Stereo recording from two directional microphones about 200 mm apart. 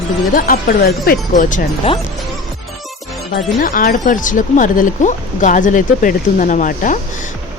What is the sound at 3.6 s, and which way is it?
Speech, 45° left (ahead or behind).